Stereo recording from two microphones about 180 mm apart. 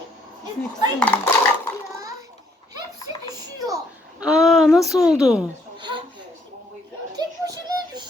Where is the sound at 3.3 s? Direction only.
20° right (ahead or behind).